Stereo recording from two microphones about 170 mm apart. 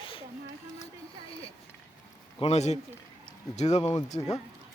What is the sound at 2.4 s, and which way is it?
A man's voice, 40° left (ahead or behind).